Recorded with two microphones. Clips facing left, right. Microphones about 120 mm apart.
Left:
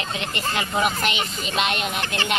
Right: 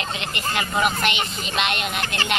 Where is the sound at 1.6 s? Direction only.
35° left (ahead or behind).